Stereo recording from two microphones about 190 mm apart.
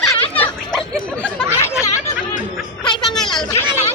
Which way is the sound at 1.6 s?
15° left (ahead or behind).